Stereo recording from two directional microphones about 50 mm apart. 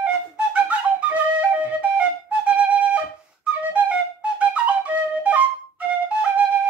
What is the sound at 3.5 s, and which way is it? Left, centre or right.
Flute, right.